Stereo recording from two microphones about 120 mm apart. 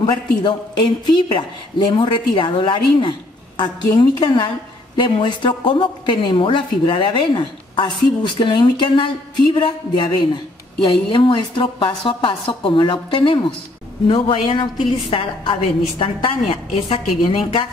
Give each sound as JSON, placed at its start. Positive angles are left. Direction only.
{"t": 0.0, "sound": "a woman's voice", "side_deg": 40}